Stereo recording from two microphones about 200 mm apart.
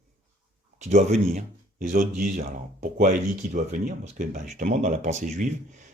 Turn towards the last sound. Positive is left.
turn(degrees=-35)  # may be behind; listen again after turning